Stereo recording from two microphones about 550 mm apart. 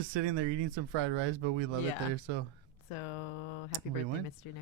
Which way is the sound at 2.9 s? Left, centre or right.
Left.